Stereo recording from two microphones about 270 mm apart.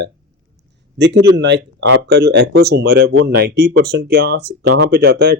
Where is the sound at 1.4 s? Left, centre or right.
Right.